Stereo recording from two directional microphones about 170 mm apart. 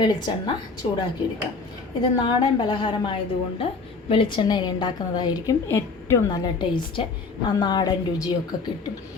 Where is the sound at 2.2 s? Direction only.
25° left (ahead or behind).